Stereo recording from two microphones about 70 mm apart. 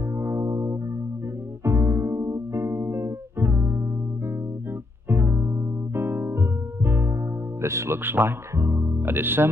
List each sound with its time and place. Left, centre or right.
0.2 s music: right
1.6 s music: right
5.0 s music: right
7.6 s speech: right